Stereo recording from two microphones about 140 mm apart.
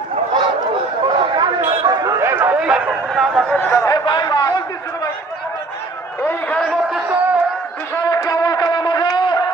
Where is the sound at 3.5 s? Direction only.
15° left (ahead or behind).